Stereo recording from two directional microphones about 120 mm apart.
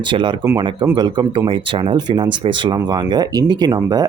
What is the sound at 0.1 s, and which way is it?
Speech, 45° right (ahead or behind).